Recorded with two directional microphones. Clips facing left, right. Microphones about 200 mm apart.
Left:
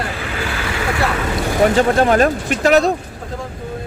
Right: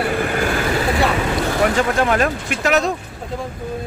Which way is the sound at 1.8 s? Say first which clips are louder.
Left 4 dB; 35° left (ahead or behind).